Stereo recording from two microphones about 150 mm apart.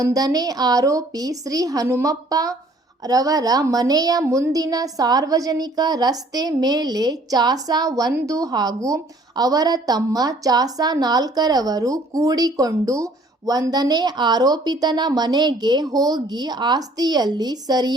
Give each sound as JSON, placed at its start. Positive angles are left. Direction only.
{"t": 0.0, "sound": "a woman's voice", "side_deg": -25}